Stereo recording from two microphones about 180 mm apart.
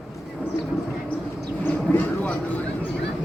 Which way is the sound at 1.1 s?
10° left (ahead or behind).